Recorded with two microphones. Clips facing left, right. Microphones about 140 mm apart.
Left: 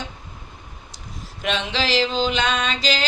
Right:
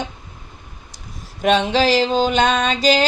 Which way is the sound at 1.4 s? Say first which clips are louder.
Right 9 dB; 45° right (ahead or behind).